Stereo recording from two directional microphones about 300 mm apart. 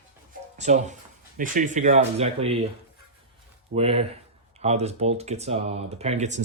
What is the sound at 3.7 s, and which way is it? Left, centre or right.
Speech, centre.